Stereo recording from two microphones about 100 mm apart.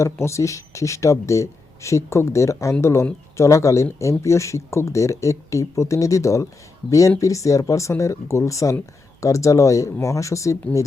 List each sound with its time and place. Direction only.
0.0 s speech: 30° left (ahead or behind)